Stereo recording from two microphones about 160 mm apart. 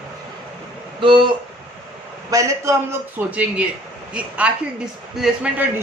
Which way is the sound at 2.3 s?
20° right (ahead or behind).